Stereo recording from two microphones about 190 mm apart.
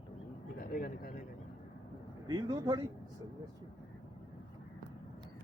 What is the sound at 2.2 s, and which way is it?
Speech, 20° right (ahead or behind).